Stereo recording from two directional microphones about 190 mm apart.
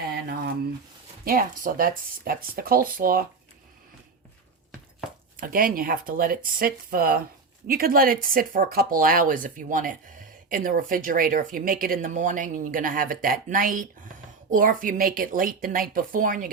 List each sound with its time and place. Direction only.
0.1 s a sound: 55° right (ahead or behind)
1.2 s speech: 50° right (ahead or behind)
5.4 s speech: 50° right (ahead or behind)